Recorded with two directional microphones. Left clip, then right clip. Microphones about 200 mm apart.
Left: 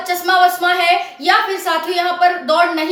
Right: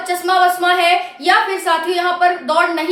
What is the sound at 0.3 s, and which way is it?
A woman's voice, 5° right (ahead or behind).